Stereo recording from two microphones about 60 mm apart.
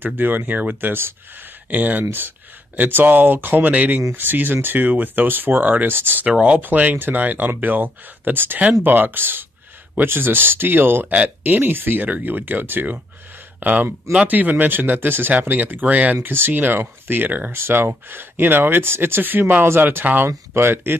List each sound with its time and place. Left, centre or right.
0.0 s speech: right
6.2 s speech: right